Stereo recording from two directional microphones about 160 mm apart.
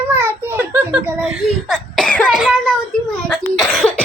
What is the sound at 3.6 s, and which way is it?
Cough, 5° left (ahead or behind).